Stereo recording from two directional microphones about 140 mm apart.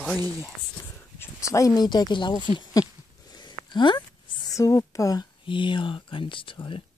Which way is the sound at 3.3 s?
30° left (ahead or behind).